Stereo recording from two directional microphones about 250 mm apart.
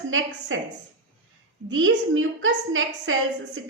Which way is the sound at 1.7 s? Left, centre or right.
Right.